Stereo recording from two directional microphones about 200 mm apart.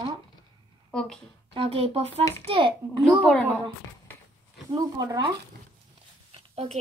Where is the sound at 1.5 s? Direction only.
30° right (ahead or behind).